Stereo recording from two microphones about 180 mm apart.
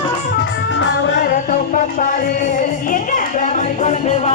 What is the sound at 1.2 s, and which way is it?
Music, 45° left (ahead or behind).